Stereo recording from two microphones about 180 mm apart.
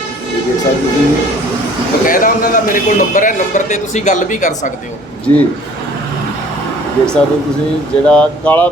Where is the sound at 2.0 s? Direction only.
50° left (ahead or behind).